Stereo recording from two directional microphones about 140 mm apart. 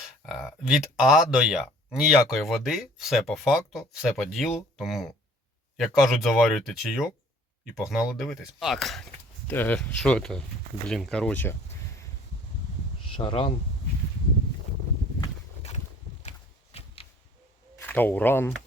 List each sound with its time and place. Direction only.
0.3 s speech: 5° right (ahead or behind)
9.5 s speech: 10° left (ahead or behind)
13.1 s speech: 35° left (ahead or behind)
16.7 s a sound: 45° left (ahead or behind)
17.8 s speech: 15° left (ahead or behind)